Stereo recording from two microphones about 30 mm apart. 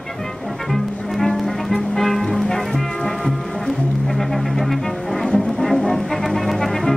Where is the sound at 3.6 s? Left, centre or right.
Centre.